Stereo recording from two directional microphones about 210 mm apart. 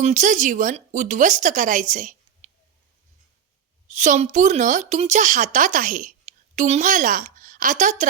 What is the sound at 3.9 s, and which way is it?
A woman's voice, 35° right (ahead or behind).